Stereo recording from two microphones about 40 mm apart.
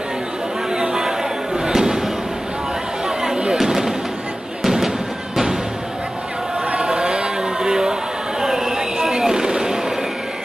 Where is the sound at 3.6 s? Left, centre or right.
Centre.